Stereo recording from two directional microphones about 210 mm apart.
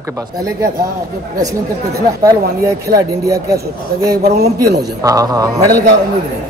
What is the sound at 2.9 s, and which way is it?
Speech, 45° right (ahead or behind).